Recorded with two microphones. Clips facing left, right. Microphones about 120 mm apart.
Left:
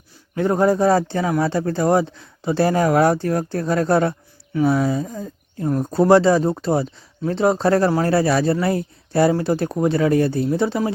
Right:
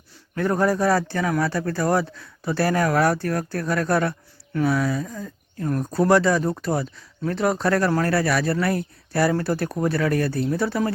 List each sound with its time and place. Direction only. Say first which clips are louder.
0.3 s speech: left 4 dB; 20° left (ahead or behind)